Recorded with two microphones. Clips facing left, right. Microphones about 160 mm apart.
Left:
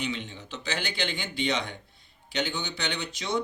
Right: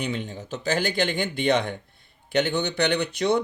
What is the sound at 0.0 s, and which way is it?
A man's voice, 50° right (ahead or behind).